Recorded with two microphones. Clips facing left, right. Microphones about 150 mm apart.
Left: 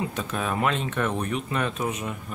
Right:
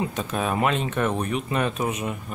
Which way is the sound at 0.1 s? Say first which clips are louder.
Right 2 dB; 20° right (ahead or behind).